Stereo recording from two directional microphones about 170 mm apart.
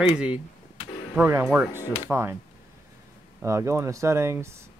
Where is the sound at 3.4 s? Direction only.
15° right (ahead or behind).